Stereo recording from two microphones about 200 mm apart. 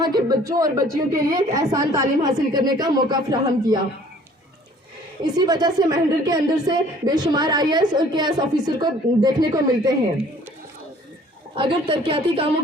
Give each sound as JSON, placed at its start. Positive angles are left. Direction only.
{"t": 0.0, "sound": "speech", "side_deg": -20}
{"t": 5.2, "sound": "speech", "side_deg": -20}
{"t": 11.5, "sound": "speech", "side_deg": -25}